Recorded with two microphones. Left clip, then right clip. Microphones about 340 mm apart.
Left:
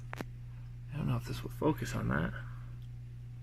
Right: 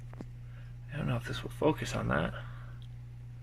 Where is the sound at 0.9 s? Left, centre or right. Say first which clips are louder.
Right 4 dB; right.